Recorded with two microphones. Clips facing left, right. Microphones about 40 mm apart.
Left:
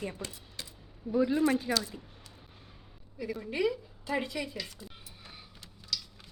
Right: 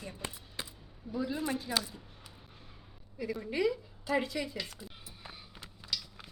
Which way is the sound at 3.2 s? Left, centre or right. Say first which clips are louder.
Left 1 dB; centre.